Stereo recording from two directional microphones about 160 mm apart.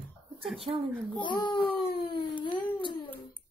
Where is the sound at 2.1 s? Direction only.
30° left (ahead or behind).